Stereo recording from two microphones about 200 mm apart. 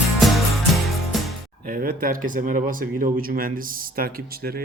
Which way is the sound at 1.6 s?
45° right (ahead or behind).